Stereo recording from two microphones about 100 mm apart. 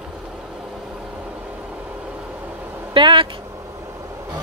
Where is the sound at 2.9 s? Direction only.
55° right (ahead or behind).